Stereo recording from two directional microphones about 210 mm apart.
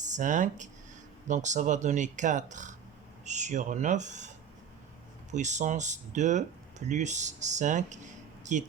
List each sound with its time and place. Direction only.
0.0 s speech: 35° right (ahead or behind)
5.3 s speech: 35° right (ahead or behind)